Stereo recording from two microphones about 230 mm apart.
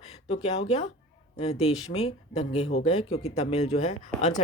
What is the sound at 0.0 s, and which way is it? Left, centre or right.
Speech, left.